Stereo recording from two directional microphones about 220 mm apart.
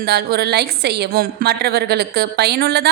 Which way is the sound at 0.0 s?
45° right (ahead or behind).